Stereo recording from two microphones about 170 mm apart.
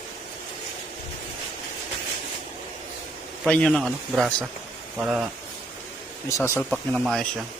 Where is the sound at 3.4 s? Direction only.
5° left (ahead or behind).